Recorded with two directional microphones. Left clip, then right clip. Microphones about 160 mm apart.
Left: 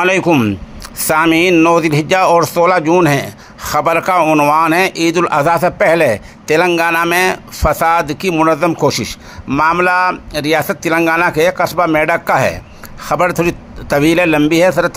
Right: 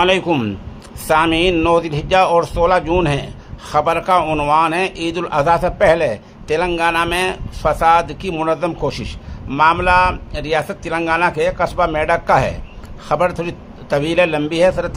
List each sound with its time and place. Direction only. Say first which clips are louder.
0.0 s a man's voice: left 2 dB; 30° left (ahead or behind)
0.3 s speech: left 6 dB; 15° left (ahead or behind)
1.0 s a man's voice: left 3 dB; 30° left (ahead or behind)
4.6 s a man's voice: left 4 dB; 30° left (ahead or behind)